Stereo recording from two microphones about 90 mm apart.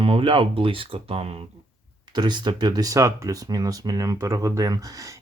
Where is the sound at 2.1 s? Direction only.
55° right (ahead or behind).